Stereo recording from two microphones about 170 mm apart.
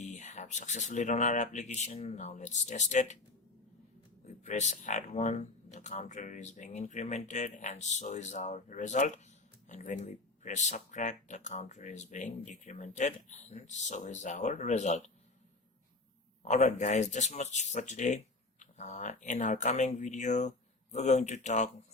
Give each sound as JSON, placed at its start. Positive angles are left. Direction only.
{"t": 0.0, "sound": "speech", "side_deg": 45}
{"t": 4.4, "sound": "speech", "side_deg": 45}
{"t": 16.4, "sound": "speech", "side_deg": 45}